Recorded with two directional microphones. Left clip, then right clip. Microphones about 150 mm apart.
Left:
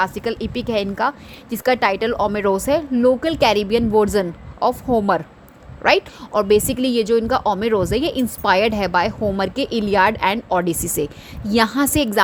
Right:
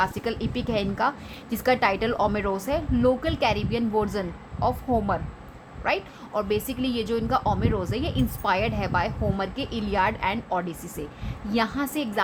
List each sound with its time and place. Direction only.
0.0 s a woman's voice: 50° left (ahead or behind)
2.9 s a woman's voice: 30° left (ahead or behind); by 12.2 s 55° left (ahead or behind)